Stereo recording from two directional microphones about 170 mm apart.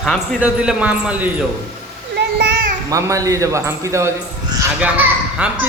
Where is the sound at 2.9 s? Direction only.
20° right (ahead or behind).